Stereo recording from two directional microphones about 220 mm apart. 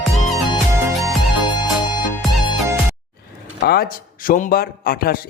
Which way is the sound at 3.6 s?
45° left (ahead or behind).